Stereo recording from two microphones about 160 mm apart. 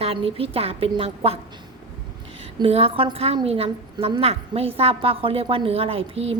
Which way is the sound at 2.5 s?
35° right (ahead or behind).